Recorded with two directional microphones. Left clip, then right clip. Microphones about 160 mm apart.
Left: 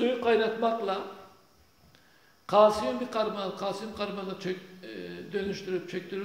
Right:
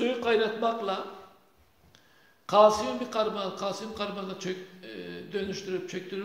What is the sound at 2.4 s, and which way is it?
A man's voice, 15° left (ahead or behind).